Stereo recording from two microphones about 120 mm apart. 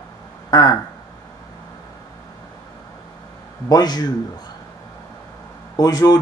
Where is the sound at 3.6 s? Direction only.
35° left (ahead or behind).